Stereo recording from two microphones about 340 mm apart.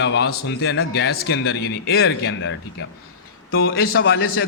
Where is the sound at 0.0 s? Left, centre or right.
Left.